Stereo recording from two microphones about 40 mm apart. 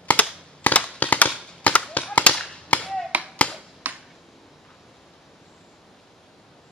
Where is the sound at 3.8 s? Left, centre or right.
Right.